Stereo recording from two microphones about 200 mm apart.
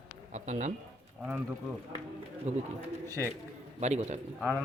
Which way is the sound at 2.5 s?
35° right (ahead or behind).